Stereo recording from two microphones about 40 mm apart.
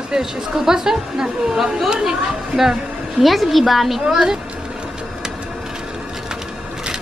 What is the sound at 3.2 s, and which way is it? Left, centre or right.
Speech, centre.